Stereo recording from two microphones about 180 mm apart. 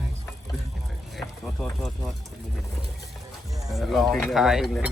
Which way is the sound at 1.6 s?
Centre (ahead or behind).